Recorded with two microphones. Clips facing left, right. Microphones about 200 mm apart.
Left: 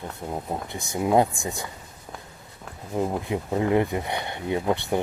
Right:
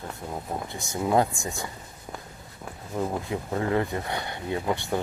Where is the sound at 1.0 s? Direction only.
20° left (ahead or behind).